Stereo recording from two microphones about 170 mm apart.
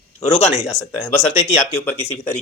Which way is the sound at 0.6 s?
20° left (ahead or behind).